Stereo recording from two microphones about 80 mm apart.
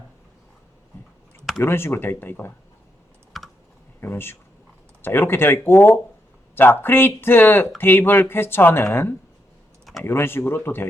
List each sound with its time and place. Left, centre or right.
1.6 s speech: left
3.3 s typing: centre
4.0 s a sound: left
5.0 s speech: left